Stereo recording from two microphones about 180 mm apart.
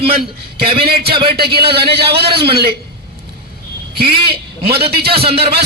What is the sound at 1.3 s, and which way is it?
Speech, 60° right (ahead or behind).